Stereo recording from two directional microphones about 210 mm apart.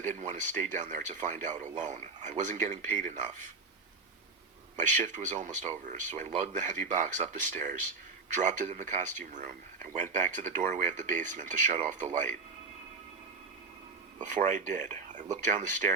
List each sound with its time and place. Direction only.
0.0 s speech: 35° right (ahead or behind)
4.9 s speech: 35° right (ahead or behind)
14.2 s speech: 35° right (ahead or behind)